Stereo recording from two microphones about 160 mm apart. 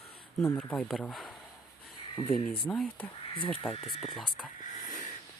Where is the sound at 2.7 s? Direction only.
5° left (ahead or behind).